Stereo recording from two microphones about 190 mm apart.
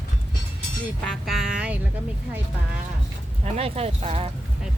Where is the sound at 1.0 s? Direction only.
Centre (ahead or behind).